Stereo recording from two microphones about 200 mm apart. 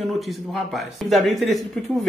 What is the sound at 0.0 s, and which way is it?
Speech, centre (ahead or behind).